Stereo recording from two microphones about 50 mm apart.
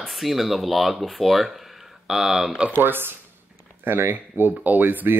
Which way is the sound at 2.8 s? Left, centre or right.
Right.